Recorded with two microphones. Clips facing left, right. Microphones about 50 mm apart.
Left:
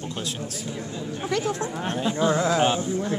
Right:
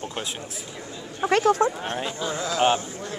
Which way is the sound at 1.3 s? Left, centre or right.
Right.